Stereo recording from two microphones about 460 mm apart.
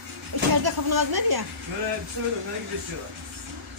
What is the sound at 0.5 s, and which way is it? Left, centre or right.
Speech, right.